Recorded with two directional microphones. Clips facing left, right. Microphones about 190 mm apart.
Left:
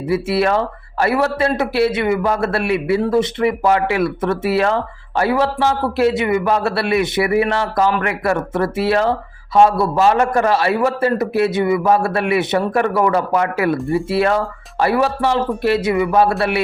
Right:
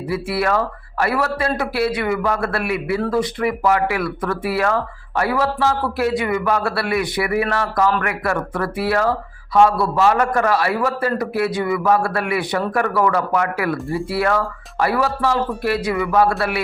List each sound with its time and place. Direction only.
0.1 s a man's voice: 25° left (ahead or behind)